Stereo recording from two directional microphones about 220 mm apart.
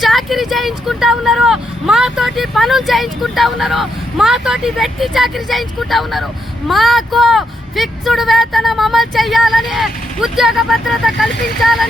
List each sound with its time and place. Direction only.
0.0 s speech: centre (ahead or behind)